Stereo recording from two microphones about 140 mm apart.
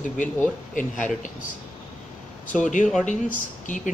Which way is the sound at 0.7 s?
65° left (ahead or behind).